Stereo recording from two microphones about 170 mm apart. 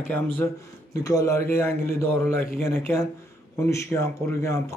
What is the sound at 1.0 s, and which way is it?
Speech, 15° left (ahead or behind).